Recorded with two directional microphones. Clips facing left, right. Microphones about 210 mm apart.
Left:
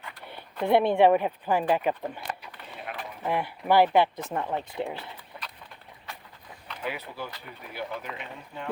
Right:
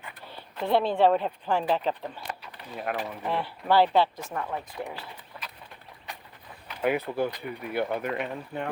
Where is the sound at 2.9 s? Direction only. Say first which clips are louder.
Right 8 dB; 50° right (ahead or behind).